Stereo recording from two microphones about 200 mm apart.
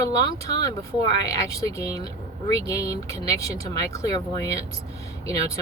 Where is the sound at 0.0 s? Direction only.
20° left (ahead or behind).